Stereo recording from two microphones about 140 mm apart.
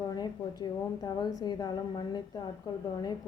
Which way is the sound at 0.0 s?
30° left (ahead or behind).